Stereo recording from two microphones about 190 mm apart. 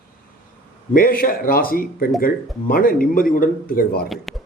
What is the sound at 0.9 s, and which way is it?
A man's voice, 50° left (ahead or behind).